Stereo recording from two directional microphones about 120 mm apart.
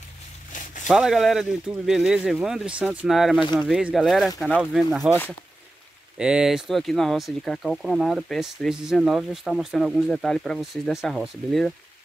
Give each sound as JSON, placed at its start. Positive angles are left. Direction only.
{"t": 0.8, "sound": "speech", "side_deg": -5}
{"t": 6.1, "sound": "speech", "side_deg": -5}